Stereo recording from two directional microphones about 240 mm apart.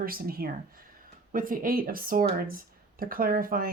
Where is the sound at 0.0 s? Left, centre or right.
Right.